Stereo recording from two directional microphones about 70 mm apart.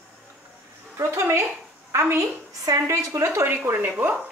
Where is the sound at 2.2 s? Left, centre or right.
Right.